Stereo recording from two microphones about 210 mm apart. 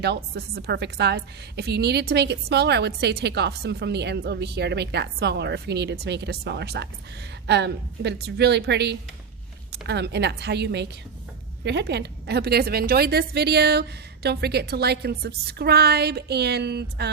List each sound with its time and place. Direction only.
0.0 s a woman's voice: 50° right (ahead or behind)